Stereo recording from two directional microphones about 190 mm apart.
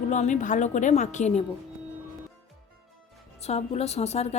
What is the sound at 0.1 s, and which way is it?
Speech, 40° left (ahead or behind).